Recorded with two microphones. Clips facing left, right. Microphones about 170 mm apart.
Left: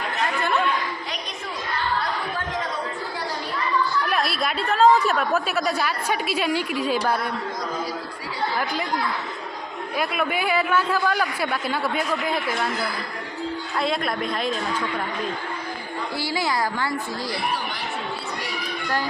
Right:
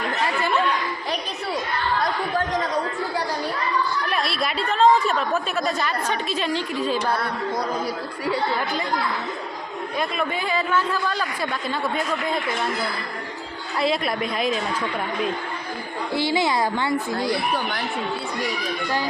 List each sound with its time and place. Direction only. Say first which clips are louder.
4.1 s a woman's voice: even; centre (ahead or behind)
10.0 s a man's voice: left 1 dB; 10° left (ahead or behind)
13.7 s a woman's voice: right 3 dB; centre (ahead or behind)
16.1 s a woman's voice: right 4 dB; 20° right (ahead or behind)